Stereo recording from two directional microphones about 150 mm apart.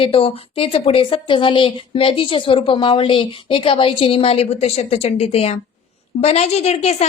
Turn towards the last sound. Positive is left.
turn(degrees=45)  # may be behind; listen again after turning